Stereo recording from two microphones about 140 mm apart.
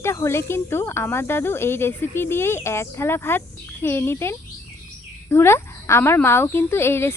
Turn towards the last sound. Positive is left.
turn(degrees=15)  # may be behind; listen again after turning